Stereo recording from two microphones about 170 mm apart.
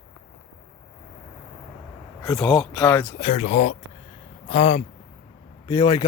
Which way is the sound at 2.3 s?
5° left (ahead or behind).